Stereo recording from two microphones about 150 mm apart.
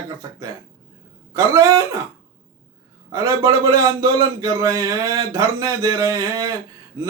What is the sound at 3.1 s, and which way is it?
A man's voice, 25° right (ahead or behind).